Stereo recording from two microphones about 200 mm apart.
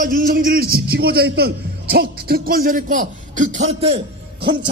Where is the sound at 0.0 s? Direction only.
45° right (ahead or behind).